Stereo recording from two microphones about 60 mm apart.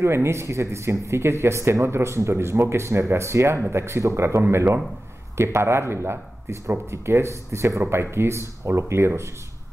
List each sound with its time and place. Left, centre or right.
0.0 s speech: right
7.9 s speech: right